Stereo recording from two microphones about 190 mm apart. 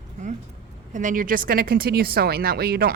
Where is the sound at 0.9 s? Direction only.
40° right (ahead or behind).